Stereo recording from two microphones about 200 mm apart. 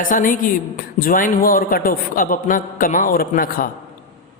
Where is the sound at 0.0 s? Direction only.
40° left (ahead or behind).